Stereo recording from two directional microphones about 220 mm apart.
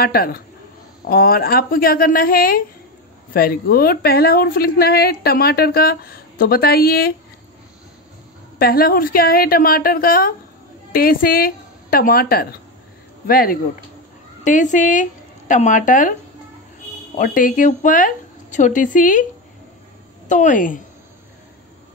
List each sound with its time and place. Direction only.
0.0 s a woman's voice: 45° left (ahead or behind)
8.5 s a woman's voice: 40° left (ahead or behind)
17.2 s speech: 40° left (ahead or behind)
20.2 s speech: 35° left (ahead or behind)